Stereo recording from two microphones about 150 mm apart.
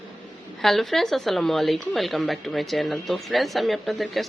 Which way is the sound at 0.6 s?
Centre (ahead or behind).